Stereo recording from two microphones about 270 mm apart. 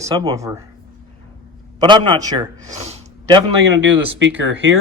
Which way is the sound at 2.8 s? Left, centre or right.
Right.